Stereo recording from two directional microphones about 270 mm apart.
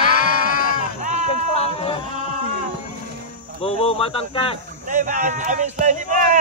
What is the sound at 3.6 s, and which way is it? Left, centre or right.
Speech, left.